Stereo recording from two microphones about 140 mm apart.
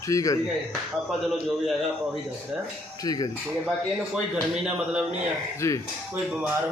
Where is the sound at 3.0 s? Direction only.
30° left (ahead or behind).